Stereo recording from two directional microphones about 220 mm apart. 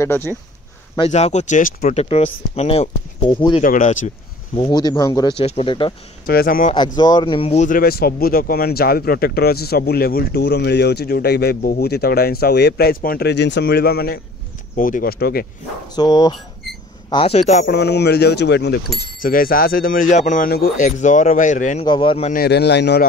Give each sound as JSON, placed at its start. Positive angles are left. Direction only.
{"t": 0.0, "sound": "speech", "side_deg": 10}
{"t": 0.9, "sound": "speech", "side_deg": 25}
{"t": 3.6, "sound": "speech", "side_deg": 35}
{"t": 4.6, "sound": "speech", "side_deg": 20}
{"t": 5.4, "sound": "speech", "side_deg": 25}
{"t": 6.2, "sound": "speech", "side_deg": 40}
{"t": 7.0, "sound": "speech", "side_deg": 20}
{"t": 15.9, "sound": "speech", "side_deg": 20}
{"t": 16.6, "sound": "a sound", "side_deg": 0}
{"t": 17.1, "sound": "speech", "side_deg": 25}
{"t": 17.6, "sound": "speech", "side_deg": 50}
{"t": 19.2, "sound": "speech", "side_deg": 40}
{"t": 21.8, "sound": "speech", "side_deg": 20}
{"t": 22.3, "sound": "speech", "side_deg": 45}